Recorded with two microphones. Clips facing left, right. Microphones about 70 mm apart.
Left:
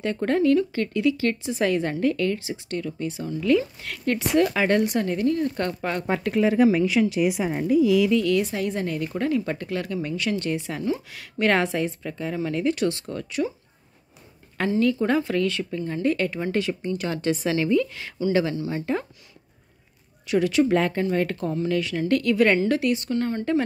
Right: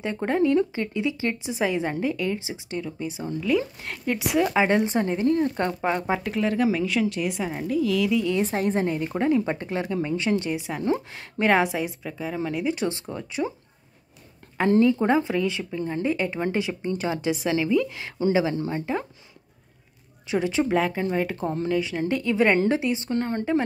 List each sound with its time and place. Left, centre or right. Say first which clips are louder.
0.0 s speech: left 1 dB; centre
4.6 s speech: even; centre
6.4 s a woman's voice: left 6 dB; centre
8.1 s speech: left 3 dB; centre
8.4 s speech: right 2 dB; right; by 13.5 s centre
14.8 s a woman's voice: even; right; by 19.0 s centre
20.2 s speech: left 3 dB; right
20.6 s speech: left 2 dB; centre; by 23.4 s right